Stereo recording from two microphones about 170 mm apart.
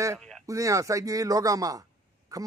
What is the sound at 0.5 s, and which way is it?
A man's voice, 20° right (ahead or behind).